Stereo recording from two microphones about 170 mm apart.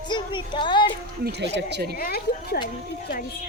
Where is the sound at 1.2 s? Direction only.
80° right.